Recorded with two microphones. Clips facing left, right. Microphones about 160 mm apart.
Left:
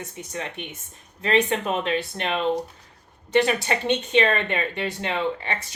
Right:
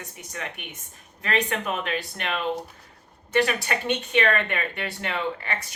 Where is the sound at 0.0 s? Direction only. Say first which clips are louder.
Left 4 dB; 25° left (ahead or behind).